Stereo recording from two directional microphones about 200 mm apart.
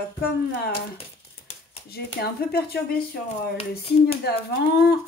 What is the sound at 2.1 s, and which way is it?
Speech, 55° left (ahead or behind).